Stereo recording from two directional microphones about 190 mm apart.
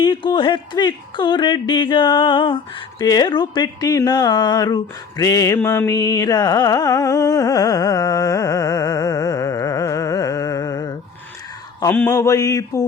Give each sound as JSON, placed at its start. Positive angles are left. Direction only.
{"t": 0.0, "sound": "speech", "side_deg": 25}
{"t": 11.8, "sound": "speech", "side_deg": 10}